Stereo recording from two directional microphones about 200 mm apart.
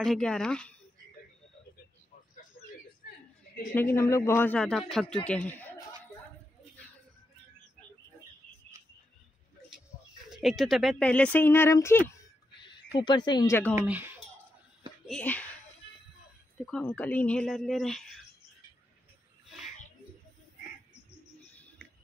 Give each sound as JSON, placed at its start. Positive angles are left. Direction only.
{"t": 0.0, "sound": "speech", "side_deg": 5}
{"t": 2.6, "sound": "a sound", "side_deg": 45}
{"t": 3.7, "sound": "speech", "side_deg": 10}
{"t": 10.3, "sound": "speech", "side_deg": 0}
{"t": 13.0, "sound": "speech", "side_deg": 20}
{"t": 13.7, "sound": "speech", "side_deg": -10}
{"t": 15.0, "sound": "speech", "side_deg": 5}
{"t": 16.6, "sound": "speech", "side_deg": 5}